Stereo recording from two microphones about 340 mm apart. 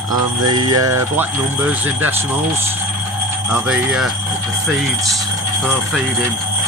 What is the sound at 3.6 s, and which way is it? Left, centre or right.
Speech, centre.